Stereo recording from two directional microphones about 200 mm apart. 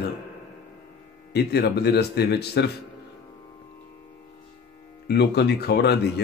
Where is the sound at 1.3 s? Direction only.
55° left (ahead or behind).